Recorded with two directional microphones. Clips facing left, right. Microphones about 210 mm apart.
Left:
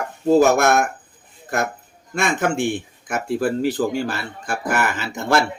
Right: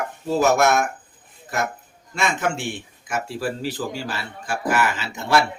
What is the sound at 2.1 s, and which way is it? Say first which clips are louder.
Speech: left 3 dB; 50° left (ahead or behind).